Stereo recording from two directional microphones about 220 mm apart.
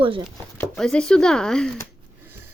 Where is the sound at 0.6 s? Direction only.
5° left (ahead or behind).